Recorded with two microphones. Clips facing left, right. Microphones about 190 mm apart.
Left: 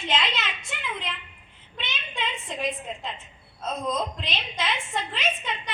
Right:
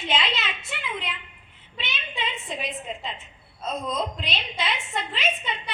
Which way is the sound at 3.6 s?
Centre (ahead or behind).